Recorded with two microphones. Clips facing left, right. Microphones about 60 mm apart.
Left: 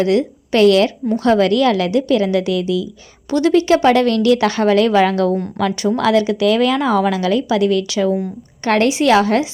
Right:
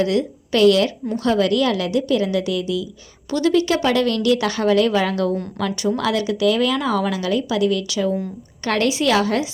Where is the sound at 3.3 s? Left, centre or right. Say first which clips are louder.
Left 4 dB; left.